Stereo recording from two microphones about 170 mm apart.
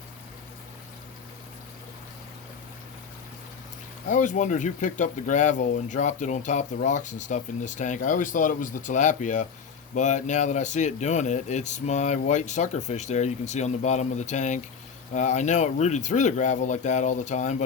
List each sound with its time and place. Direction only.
4.1 s speech: 45° left (ahead or behind)